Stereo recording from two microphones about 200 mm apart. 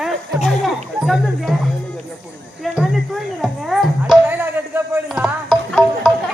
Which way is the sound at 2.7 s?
Centre (ahead or behind).